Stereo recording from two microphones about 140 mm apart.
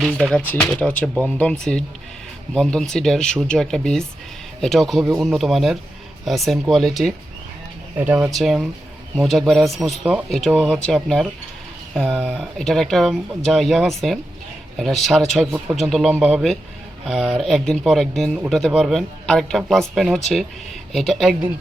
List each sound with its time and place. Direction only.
0.1 s speech: 5° left (ahead or behind)
7.9 s speech: 15° right (ahead or behind)
8.3 s speech: centre (ahead or behind)
10.2 s speech: 5° left (ahead or behind)